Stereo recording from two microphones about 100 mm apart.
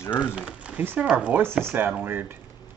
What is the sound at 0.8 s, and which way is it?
Speech, 20° right (ahead or behind).